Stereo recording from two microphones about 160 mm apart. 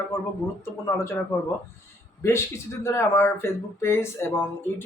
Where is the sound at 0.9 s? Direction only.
15° left (ahead or behind).